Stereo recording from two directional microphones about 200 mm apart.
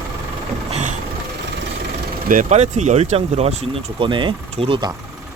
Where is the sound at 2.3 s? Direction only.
35° right (ahead or behind).